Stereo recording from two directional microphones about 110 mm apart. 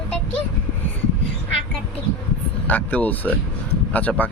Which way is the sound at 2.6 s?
15° left (ahead or behind).